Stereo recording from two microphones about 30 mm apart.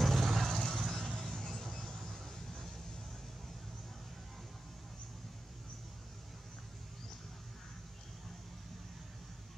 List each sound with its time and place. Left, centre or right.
0.0 s vehicle: centre
1.2 s music: centre
1.9 s vehicle: centre